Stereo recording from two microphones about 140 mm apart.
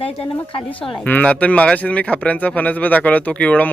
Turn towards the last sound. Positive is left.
turn(degrees=10)  # may be behind; listen again after turning